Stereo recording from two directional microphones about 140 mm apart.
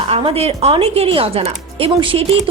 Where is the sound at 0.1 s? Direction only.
45° right (ahead or behind).